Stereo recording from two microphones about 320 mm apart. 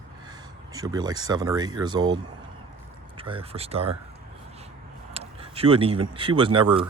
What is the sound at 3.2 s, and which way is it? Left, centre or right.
Speech, centre.